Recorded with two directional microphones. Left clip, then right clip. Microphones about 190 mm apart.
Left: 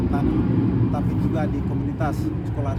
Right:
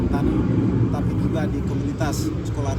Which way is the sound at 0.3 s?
35° left (ahead or behind).